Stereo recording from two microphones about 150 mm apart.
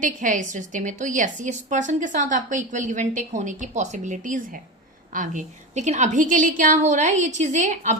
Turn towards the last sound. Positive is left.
turn(degrees=-55)  # may be behind; listen again after turning